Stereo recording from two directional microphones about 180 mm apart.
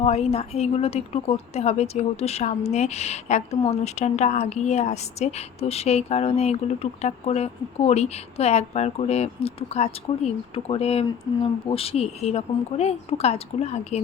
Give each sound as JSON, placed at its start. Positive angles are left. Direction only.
{"t": 0.0, "sound": "speech", "side_deg": 35}